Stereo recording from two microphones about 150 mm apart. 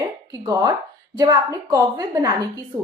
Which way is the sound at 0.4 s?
25° right (ahead or behind).